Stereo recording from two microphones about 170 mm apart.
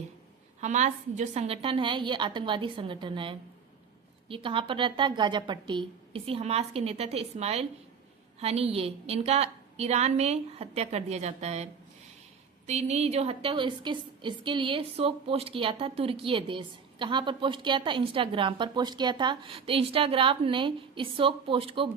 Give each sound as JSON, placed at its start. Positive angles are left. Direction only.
{"t": 0.6, "sound": "a woman's voice", "side_deg": -45}